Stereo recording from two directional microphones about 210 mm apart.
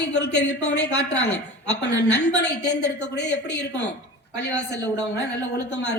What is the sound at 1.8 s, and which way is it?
A woman's voice, 55° left (ahead or behind).